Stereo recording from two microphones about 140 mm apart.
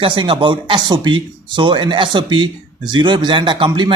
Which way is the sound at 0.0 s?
40° right (ahead or behind).